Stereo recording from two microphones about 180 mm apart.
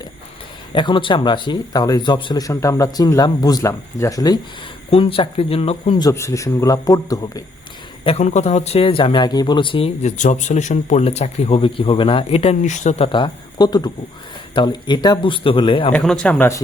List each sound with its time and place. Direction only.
0.7 s speech: 25° left (ahead or behind)
4.9 s speech: 30° left (ahead or behind)
6.0 s a man's voice: 15° left (ahead or behind)
8.0 s speech: 35° left (ahead or behind)
13.1 s speech: 25° left (ahead or behind)
15.9 s a man's voice: 5° left (ahead or behind)